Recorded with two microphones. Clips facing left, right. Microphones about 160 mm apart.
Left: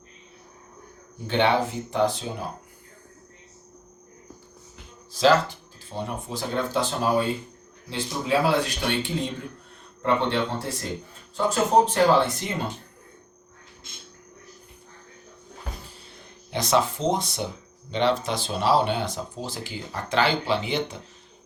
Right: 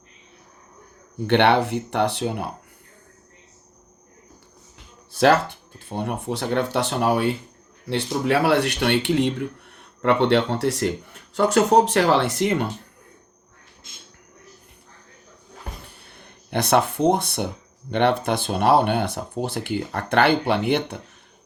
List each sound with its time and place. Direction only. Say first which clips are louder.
1.3 s speech: right 5 dB; 70° right (ahead or behind)
5.1 s speech: right 2 dB; 60° right (ahead or behind)
16.0 s a sound: left 1 dB; 60° right (ahead or behind)
17.9 s speech: right 3 dB; 60° right (ahead or behind)